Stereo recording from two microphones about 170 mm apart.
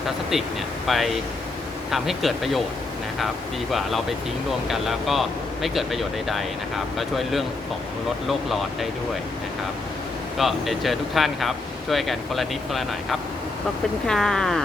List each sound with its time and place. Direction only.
0.9 s speech: centre (ahead or behind)
3.7 s speech: centre (ahead or behind)
10.3 s speech: centre (ahead or behind)